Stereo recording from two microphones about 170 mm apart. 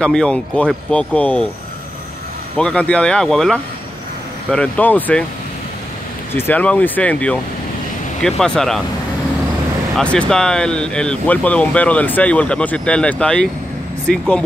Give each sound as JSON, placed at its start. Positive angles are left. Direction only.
{"t": 0.0, "sound": "speech", "side_deg": 5}
{"t": 2.5, "sound": "speech", "side_deg": 5}
{"t": 6.3, "sound": "speech", "side_deg": 10}
{"t": 9.9, "sound": "speech", "side_deg": 5}